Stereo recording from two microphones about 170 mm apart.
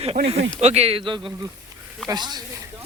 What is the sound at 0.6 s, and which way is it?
Speech, 40° right (ahead or behind).